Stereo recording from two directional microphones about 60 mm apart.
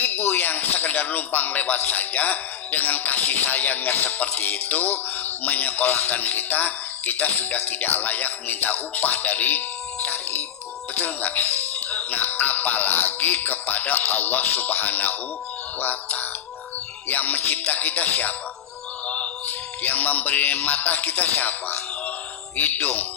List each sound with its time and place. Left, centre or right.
0.0 s speech: left
19.0 s music: left
22.5 s speech: left